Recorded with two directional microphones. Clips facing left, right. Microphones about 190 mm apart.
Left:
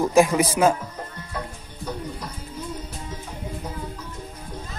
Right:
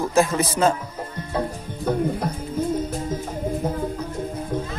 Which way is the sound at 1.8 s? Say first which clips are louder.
Right 10 dB; 55° right (ahead or behind).